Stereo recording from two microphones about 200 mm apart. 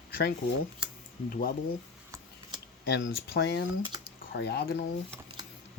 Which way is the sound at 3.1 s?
50° left (ahead or behind).